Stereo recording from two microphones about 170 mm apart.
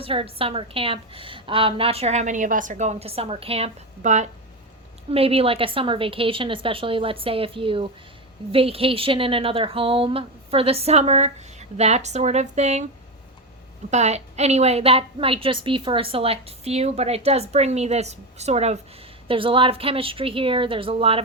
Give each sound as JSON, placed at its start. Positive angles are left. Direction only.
{"t": 0.0, "sound": "a woman's voice", "side_deg": -30}
{"t": 13.9, "sound": "a woman's voice", "side_deg": -40}